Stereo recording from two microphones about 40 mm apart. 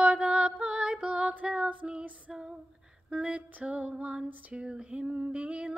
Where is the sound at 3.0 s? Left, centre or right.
Right.